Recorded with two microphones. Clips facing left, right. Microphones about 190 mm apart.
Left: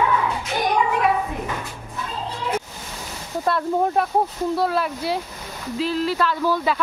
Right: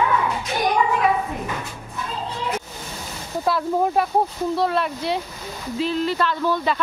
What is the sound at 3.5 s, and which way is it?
Speech, centre (ahead or behind).